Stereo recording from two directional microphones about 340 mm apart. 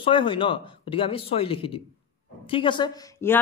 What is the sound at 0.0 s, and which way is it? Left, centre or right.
A man's voice, centre.